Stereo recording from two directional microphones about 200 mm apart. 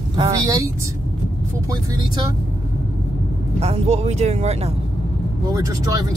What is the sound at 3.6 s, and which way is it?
Speech, 30° right (ahead or behind).